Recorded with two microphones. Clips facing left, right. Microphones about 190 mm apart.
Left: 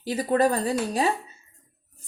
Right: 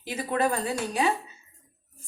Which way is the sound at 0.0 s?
35° left (ahead or behind).